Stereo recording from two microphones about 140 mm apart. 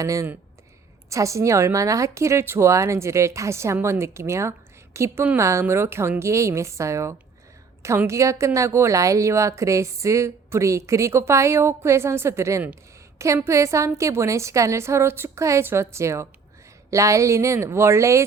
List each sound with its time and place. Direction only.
0.0 s a woman's voice: 25° right (ahead or behind)